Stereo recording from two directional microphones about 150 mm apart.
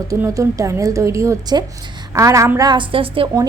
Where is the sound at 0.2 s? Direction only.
20° right (ahead or behind).